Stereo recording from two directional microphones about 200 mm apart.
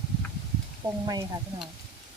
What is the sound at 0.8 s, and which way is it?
Speech, 20° right (ahead or behind).